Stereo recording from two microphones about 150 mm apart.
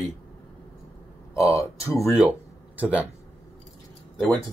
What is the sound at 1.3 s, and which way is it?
Speech, 20° left (ahead or behind).